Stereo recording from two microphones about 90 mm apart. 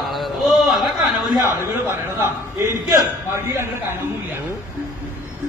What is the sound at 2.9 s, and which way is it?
Speech, 30° right (ahead or behind).